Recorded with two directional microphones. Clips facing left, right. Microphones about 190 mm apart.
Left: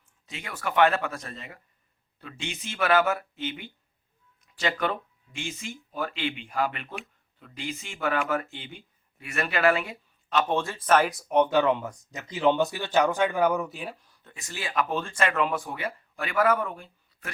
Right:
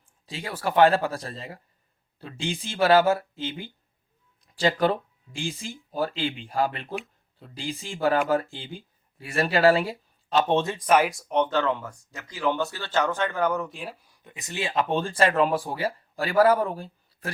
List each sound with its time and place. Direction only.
0.3 s speech: 30° right (ahead or behind); by 11.1 s 10° right (ahead or behind)
11.1 s speech: 5° left (ahead or behind)
14.0 s speech: 15° right (ahead or behind); by 17.3 s 35° right (ahead or behind)